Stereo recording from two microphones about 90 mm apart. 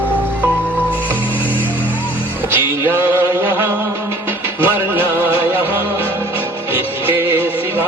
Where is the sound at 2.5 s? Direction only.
25° right (ahead or behind).